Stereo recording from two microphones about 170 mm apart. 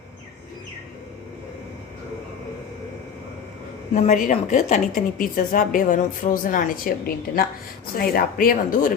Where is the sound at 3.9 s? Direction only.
45° left (ahead or behind).